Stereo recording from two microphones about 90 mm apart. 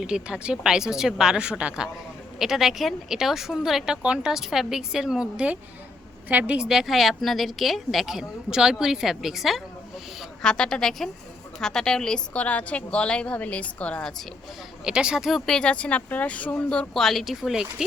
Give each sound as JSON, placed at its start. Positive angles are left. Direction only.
{"t": 0.0, "sound": "a woman's voice", "side_deg": -10}
{"t": 10.4, "sound": "a woman's voice", "side_deg": 10}
{"t": 14.8, "sound": "a woman's voice", "side_deg": -10}
{"t": 15.4, "sound": "a woman's voice", "side_deg": 10}